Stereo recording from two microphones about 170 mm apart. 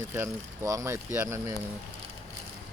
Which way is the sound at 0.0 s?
15° right (ahead or behind).